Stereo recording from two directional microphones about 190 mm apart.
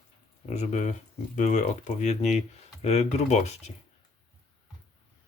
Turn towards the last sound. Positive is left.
turn(degrees=35)  # may be behind; listen again after turning